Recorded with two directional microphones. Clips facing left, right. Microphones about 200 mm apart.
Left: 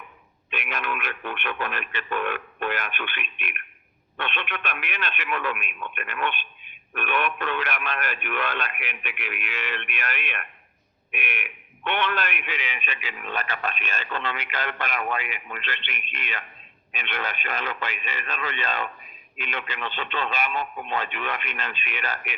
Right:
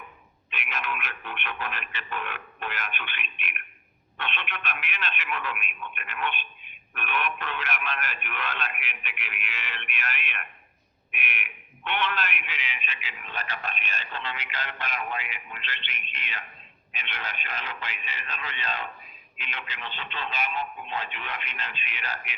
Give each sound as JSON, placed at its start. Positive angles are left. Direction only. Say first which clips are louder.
{"t": 0.5, "sound": "a man's voice", "louder": "left 4 dB", "side_deg": 55}